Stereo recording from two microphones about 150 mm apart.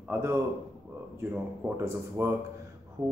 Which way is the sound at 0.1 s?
15° right (ahead or behind).